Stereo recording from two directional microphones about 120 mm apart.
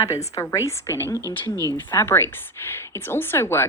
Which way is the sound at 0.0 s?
25° left (ahead or behind).